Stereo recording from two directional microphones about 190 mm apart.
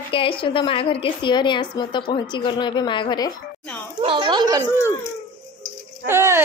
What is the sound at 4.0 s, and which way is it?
Speech, 25° right (ahead or behind).